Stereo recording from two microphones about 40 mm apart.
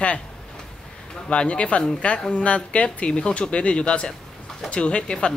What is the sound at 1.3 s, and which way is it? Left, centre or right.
Speech, left.